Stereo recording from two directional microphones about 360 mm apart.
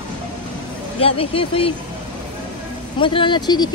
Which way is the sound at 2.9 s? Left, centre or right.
Centre.